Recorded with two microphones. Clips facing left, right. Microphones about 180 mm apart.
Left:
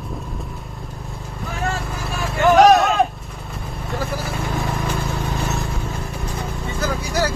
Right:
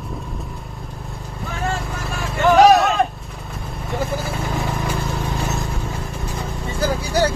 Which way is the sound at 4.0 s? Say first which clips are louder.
Right 2 dB; 25° right (ahead or behind).